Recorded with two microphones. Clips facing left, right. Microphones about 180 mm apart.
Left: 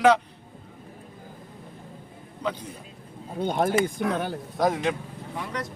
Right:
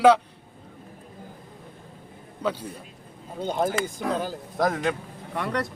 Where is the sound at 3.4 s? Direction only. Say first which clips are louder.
Left 2 dB; 60° left (ahead or behind).